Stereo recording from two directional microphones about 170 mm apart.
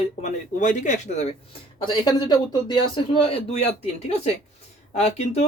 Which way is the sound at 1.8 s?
25° left (ahead or behind).